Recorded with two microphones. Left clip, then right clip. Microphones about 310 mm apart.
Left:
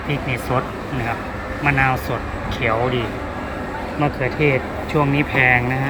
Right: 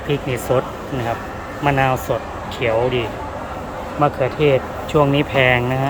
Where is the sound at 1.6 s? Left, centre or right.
Centre.